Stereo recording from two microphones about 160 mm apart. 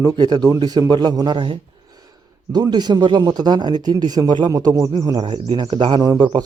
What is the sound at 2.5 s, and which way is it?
A man's voice, 25° right (ahead or behind).